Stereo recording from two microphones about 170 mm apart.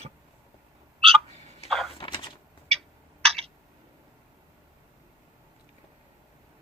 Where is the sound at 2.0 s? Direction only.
30° left (ahead or behind).